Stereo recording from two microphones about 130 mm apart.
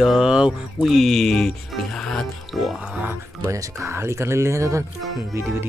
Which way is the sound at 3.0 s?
20° right (ahead or behind).